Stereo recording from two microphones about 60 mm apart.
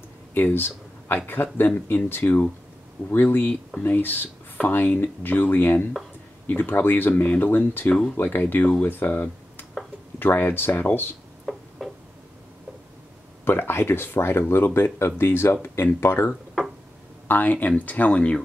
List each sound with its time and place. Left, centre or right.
0.3 s speech: left
11.5 s a sound: centre
13.5 s speech: left
17.3 s speech: left